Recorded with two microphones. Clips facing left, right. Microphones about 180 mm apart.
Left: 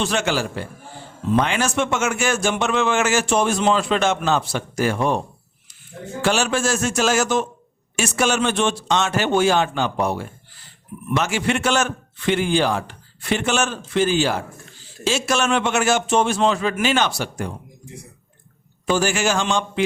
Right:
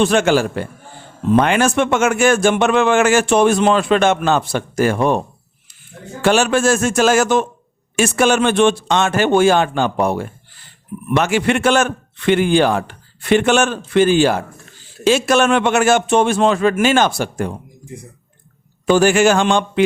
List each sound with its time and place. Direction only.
0.0 s a man's voice: 50° right (ahead or behind)
6.2 s a man's voice: 55° right (ahead or behind)
18.9 s a man's voice: 60° right (ahead or behind)